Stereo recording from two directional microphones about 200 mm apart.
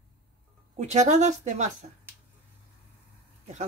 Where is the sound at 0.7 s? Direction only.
35° right (ahead or behind).